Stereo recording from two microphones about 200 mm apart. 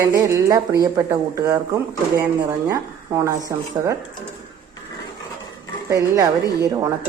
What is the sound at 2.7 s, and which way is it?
A woman's voice, 15° right (ahead or behind).